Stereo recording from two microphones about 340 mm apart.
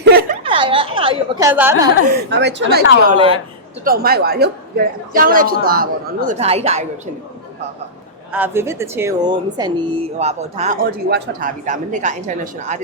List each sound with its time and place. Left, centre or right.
0.0 s a sound: right
0.4 s a woman's voice: centre
2.4 s speech: right
3.0 s speech: centre
8.3 s speech: centre